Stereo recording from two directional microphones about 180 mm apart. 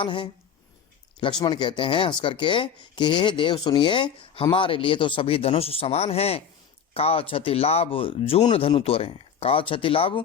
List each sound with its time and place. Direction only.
0.0 s a man's voice: 25° left (ahead or behind)